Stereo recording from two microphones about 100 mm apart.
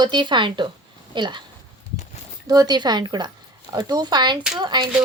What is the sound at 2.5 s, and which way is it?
A woman's voice, 40° right (ahead or behind).